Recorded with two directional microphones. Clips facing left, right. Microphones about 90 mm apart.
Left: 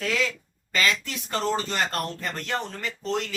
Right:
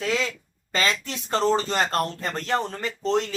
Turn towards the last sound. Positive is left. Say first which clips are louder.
# right 5 dB
turn(degrees=-35)  # may be behind; listen again after turning